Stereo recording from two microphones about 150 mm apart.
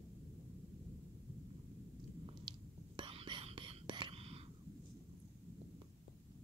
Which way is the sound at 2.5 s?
30° right (ahead or behind).